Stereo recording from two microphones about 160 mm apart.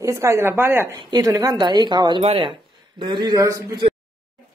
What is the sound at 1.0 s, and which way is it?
A woman's voice, 25° right (ahead or behind).